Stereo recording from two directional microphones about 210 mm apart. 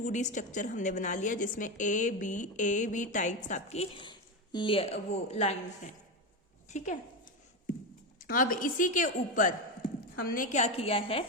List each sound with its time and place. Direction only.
0.0 s a woman's voice: 35° left (ahead or behind)
8.2 s a woman's voice: 40° left (ahead or behind)